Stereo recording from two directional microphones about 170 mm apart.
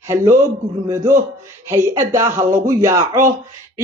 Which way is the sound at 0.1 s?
15° right (ahead or behind).